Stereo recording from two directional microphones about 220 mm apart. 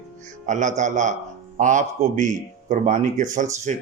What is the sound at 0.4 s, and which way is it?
Speech, 35° right (ahead or behind).